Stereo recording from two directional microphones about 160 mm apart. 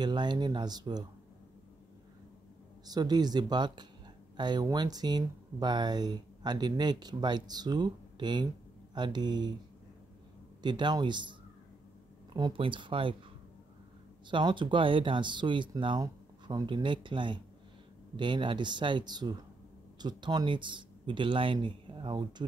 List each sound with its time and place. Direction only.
0.0 s speech: 30° right (ahead or behind)
2.9 s speech: 25° right (ahead or behind)
10.6 s speech: 25° right (ahead or behind)
12.4 s speech: 30° right (ahead or behind)
14.3 s speech: 30° right (ahead or behind)